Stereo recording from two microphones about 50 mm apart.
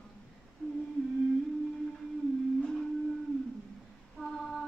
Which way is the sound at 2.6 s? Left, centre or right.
Centre.